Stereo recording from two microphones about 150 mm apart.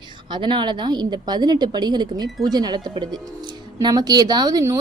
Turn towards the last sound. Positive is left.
turn(degrees=-25)  # may be behind; listen again after turning